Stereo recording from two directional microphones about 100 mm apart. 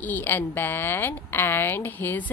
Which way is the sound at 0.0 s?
20° left (ahead or behind).